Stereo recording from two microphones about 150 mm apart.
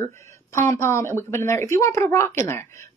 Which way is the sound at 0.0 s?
20° left (ahead or behind).